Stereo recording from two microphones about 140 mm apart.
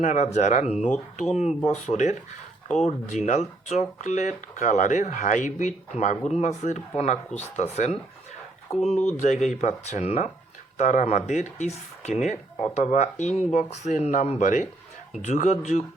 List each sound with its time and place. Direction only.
0.0 s speech: 55° left (ahead or behind)